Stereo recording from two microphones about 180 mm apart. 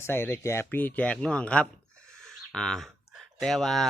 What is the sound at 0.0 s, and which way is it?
Speech, 15° left (ahead or behind).